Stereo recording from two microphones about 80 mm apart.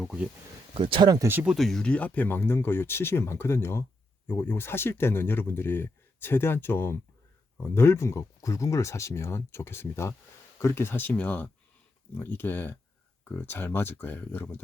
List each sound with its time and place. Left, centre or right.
0.7 s speech: right
1.5 s speech: centre
1.8 s speech: centre